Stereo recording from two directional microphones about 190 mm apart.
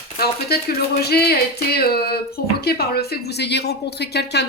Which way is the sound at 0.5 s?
55° left (ahead or behind).